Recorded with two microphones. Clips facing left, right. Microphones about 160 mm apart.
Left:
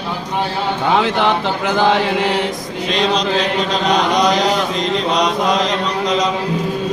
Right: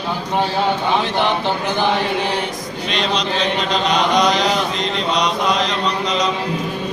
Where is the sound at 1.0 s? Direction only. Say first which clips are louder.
Left 3 dB; 90° left.